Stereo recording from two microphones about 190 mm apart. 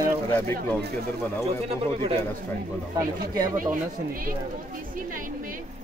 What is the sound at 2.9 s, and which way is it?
Speech, 20° right (ahead or behind).